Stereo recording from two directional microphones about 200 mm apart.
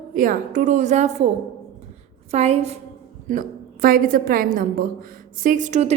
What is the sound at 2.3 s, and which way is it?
Speech, 30° right (ahead or behind).